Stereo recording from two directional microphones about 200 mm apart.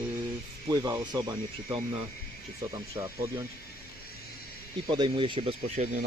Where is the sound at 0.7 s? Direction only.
20° right (ahead or behind).